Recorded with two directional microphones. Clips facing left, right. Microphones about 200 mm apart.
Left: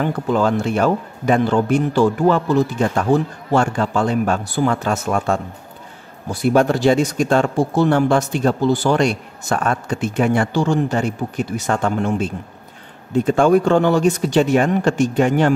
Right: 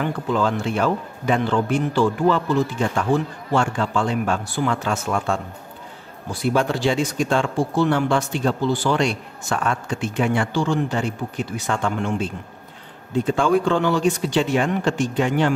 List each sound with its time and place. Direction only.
0.0 s speech: 45° left (ahead or behind)
6.4 s speech: 45° left (ahead or behind)